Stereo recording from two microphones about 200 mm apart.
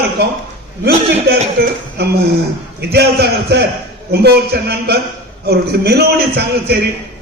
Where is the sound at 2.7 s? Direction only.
55° right (ahead or behind).